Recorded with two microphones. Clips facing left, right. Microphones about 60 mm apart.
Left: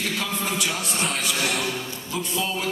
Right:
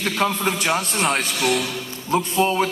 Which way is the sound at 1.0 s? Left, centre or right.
Right.